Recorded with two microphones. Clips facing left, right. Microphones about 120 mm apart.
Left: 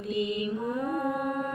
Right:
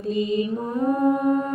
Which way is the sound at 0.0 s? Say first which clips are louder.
Right 6 dB; 35° right (ahead or behind).